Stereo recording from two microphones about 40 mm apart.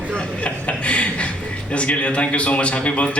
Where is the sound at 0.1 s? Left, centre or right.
Left.